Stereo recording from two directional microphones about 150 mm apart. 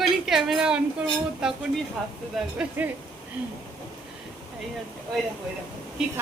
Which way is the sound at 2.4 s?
Centre (ahead or behind).